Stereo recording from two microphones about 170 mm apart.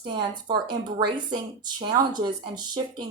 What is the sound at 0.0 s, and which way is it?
A woman's voice, 25° right (ahead or behind).